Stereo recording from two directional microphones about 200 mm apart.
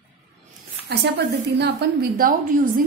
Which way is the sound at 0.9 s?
55° right (ahead or behind).